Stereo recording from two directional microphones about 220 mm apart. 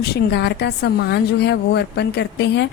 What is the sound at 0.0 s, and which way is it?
A woman's voice, 45° left (ahead or behind).